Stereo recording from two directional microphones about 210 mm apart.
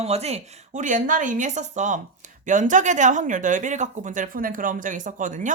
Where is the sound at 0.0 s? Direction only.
30° right (ahead or behind).